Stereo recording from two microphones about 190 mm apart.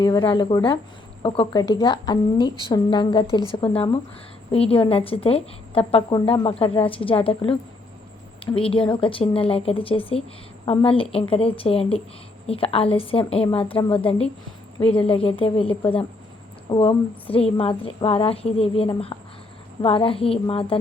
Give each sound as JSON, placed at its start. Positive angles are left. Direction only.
{"t": 0.0, "sound": "a woman's voice", "side_deg": 20}
{"t": 8.5, "sound": "a woman's voice", "side_deg": 30}